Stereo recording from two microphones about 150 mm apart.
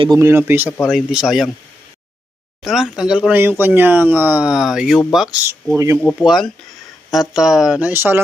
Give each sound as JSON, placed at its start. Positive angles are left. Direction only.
{"t": 0.2, "sound": "speech", "side_deg": -15}
{"t": 0.7, "sound": "speech", "side_deg": 10}
{"t": 0.9, "sound": "speech", "side_deg": -5}
{"t": 2.6, "sound": "speech", "side_deg": -5}
{"t": 6.0, "sound": "speech", "side_deg": 10}
{"t": 6.2, "sound": "speech", "side_deg": 0}